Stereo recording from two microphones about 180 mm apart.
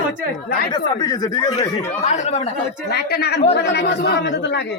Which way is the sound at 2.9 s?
65° left (ahead or behind).